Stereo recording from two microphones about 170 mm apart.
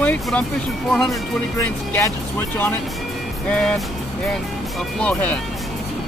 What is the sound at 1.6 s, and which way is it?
Speech, 15° left (ahead or behind).